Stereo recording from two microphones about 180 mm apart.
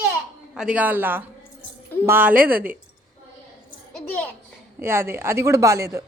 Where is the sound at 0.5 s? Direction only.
5° right (ahead or behind).